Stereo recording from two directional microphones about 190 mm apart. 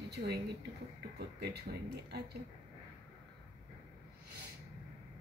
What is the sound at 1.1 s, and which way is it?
A man's voice, 60° right (ahead or behind).